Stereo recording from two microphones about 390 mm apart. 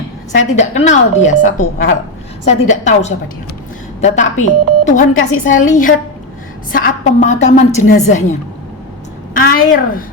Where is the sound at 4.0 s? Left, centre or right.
Centre.